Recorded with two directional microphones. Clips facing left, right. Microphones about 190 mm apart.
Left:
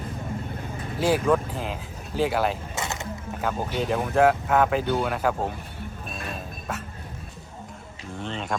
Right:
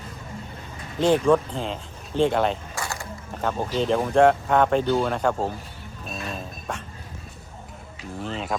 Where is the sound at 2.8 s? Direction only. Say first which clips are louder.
Left 1 dB; 20° left (ahead or behind).